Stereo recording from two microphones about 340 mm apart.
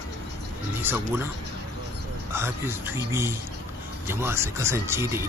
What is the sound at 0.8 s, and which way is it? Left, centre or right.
Speech, centre.